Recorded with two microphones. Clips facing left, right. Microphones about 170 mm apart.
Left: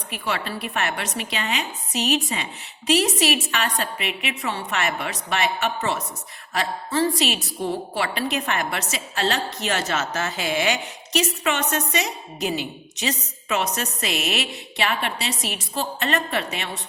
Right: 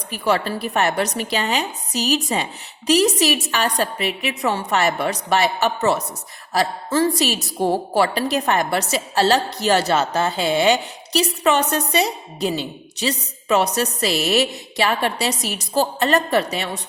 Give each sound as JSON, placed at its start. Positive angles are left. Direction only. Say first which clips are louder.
{"t": 0.1, "sound": "speech", "louder": "right 7 dB", "side_deg": -40}